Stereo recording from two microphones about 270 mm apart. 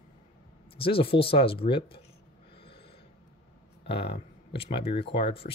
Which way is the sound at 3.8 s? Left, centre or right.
Centre.